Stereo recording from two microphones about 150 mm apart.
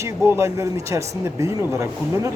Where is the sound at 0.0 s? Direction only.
15° right (ahead or behind).